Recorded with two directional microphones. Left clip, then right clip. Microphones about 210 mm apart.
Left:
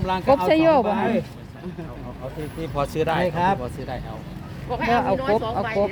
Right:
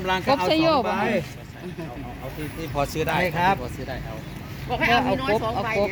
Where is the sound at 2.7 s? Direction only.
50° left (ahead or behind).